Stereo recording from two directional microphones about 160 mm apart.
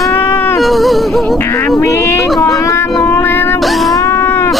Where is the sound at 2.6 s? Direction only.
20° left (ahead or behind).